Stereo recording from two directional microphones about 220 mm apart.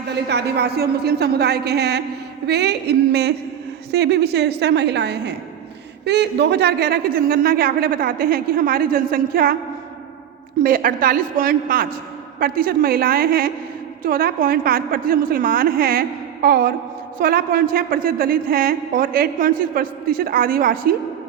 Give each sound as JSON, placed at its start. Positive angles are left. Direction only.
{"t": 0.3, "sound": "a woman's voice", "side_deg": -50}
{"t": 10.6, "sound": "a woman's voice", "side_deg": -40}